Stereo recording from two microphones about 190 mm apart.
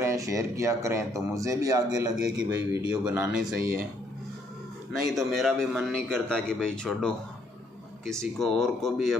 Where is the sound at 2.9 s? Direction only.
5° right (ahead or behind).